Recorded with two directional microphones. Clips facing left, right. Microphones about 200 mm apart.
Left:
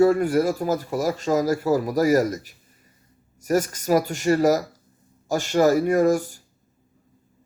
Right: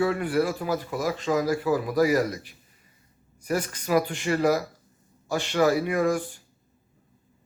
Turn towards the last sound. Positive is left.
turn(degrees=40)  # may be behind; listen again after turning